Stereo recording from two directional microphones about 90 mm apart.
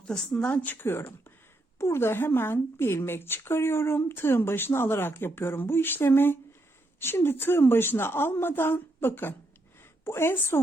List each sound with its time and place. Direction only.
0.0 s speech: 10° left (ahead or behind); by 10.6 s 25° left (ahead or behind)